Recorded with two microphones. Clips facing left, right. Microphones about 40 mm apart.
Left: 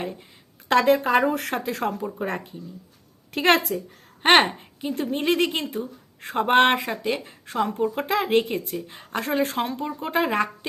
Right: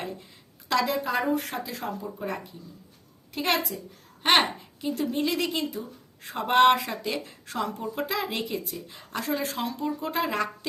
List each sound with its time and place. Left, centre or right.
0.7 s speech: left
0.9 s speech: left
1.2 s speech: left
2.0 s speech: left
4.8 s speech: left
5.0 s speech: left
8.0 s speech: left